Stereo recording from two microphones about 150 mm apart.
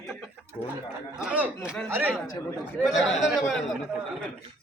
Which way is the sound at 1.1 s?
10° right (ahead or behind).